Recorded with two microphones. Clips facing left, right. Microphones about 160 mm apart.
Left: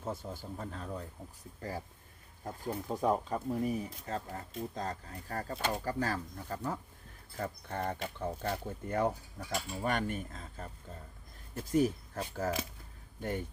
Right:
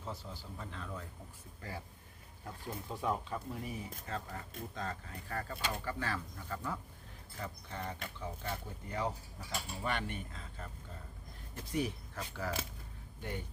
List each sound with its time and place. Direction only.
0.0 s speech: 50° left (ahead or behind)
7.3 s speech: 50° left (ahead or behind)